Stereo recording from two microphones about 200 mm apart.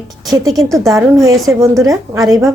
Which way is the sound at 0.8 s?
15° right (ahead or behind).